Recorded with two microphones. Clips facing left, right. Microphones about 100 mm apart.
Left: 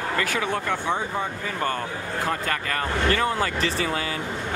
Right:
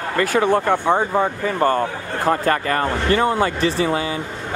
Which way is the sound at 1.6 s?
35° right (ahead or behind).